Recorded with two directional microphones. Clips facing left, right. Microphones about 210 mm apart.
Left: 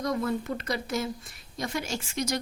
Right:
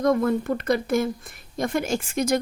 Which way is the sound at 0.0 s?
50° right (ahead or behind).